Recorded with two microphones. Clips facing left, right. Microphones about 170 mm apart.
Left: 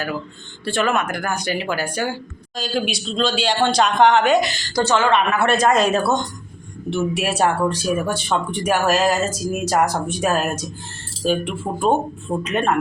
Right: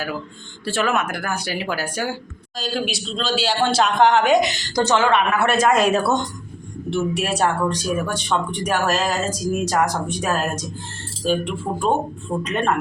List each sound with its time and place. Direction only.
0.6 s speech: 5° right (ahead or behind)
5.1 s speech: 5° right (ahead or behind)
6.9 s speech: 5° left (ahead or behind)